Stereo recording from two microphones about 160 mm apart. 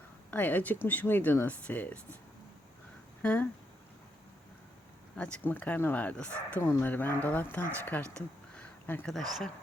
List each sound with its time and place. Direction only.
0.3 s speech: 10° left (ahead or behind)
3.2 s speech: 10° left (ahead or behind)
5.1 s speech: 5° left (ahead or behind)